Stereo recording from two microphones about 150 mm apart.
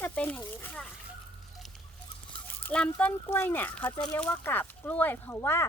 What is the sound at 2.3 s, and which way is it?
Speech, 5° left (ahead or behind).